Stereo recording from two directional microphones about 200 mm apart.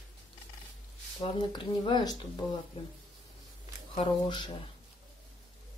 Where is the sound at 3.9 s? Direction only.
25° left (ahead or behind).